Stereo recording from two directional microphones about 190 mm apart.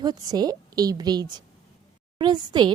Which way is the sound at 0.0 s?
20° right (ahead or behind).